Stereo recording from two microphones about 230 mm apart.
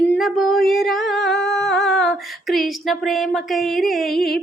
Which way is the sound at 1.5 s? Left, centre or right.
Centre.